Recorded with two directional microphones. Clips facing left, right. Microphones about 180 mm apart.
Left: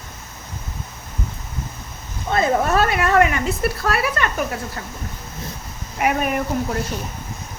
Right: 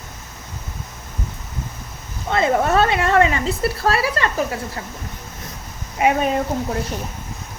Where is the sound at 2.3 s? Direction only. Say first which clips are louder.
Right 1 dB; 25° right (ahead or behind).